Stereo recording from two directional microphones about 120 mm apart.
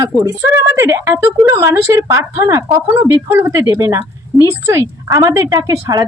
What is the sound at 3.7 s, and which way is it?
Speech, 25° right (ahead or behind).